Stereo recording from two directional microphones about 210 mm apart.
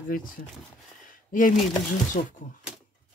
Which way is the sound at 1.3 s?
40° left (ahead or behind).